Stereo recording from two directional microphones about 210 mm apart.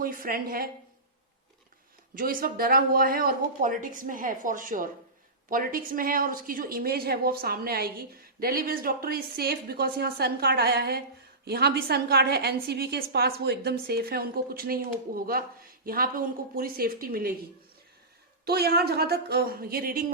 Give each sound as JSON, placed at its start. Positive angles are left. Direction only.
{"t": 0.0, "sound": "a woman's voice", "side_deg": -45}
{"t": 2.1, "sound": "a woman's voice", "side_deg": -45}
{"t": 18.4, "sound": "a woman's voice", "side_deg": -50}